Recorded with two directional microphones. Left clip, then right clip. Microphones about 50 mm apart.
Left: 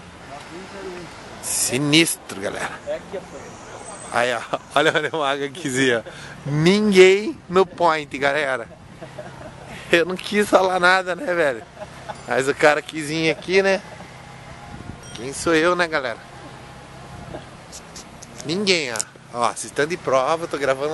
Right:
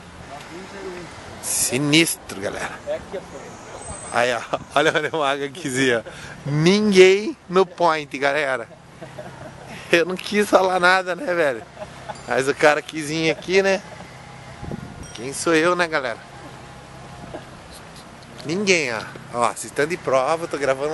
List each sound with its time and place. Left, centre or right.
0.7 s speech: centre
1.4 s speech: centre
4.1 s speech: left
9.8 s speech: centre
15.1 s speech: centre
18.4 s speech: centre